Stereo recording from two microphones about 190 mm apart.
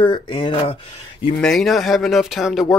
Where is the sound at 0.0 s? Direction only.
25° left (ahead or behind).